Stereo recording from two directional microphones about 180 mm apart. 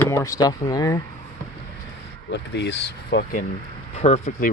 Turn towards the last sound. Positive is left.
turn(degrees=35)  # may be behind; listen again after turning